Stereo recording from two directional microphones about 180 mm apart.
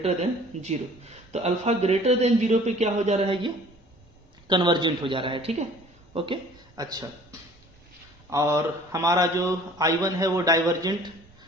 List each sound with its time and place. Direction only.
0.0 s a man's voice: 35° right (ahead or behind); by 7.1 s 20° right (ahead or behind)
8.3 s a man's voice: 15° right (ahead or behind)